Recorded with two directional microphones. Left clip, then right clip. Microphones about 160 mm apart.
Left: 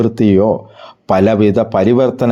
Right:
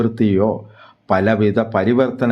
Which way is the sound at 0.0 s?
30° left (ahead or behind).